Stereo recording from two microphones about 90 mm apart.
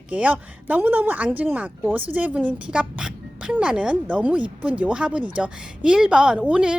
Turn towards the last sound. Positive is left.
turn(degrees=-10)  # may be behind; listen again after turning